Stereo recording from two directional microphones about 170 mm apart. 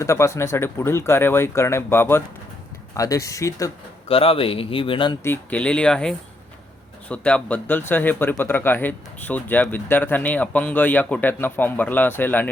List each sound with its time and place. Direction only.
0.0 s speech: 15° left (ahead or behind)
4.1 s a man's voice: 35° left (ahead or behind)
5.2 s speech: 10° left (ahead or behind)